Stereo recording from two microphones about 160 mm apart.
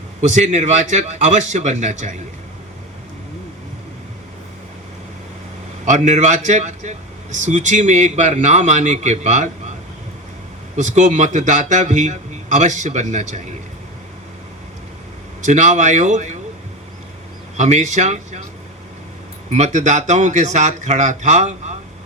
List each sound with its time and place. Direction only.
0.2 s a man's voice: 50° right (ahead or behind)
5.8 s a man's voice: 50° right (ahead or behind)
10.8 s a man's voice: 50° right (ahead or behind)
15.4 s a man's voice: 50° right (ahead or behind)
17.6 s a man's voice: 45° right (ahead or behind)
19.5 s a man's voice: 45° right (ahead or behind)